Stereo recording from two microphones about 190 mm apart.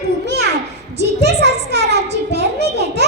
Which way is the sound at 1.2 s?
60° right (ahead or behind).